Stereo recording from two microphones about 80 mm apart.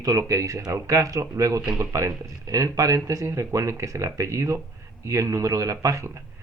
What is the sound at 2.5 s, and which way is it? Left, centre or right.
Speech, right.